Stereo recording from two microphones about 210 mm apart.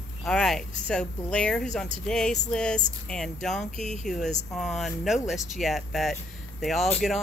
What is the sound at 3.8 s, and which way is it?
Speech, 35° left (ahead or behind).